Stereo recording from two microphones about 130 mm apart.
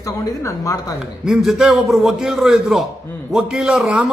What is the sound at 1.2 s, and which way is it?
A man's voice, 5° right (ahead or behind).